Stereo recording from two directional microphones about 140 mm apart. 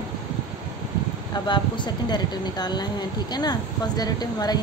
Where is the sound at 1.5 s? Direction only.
30° left (ahead or behind).